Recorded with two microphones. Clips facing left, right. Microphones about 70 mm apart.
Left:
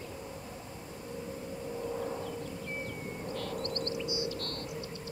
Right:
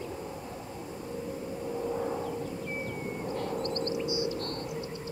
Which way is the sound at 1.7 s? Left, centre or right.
Centre.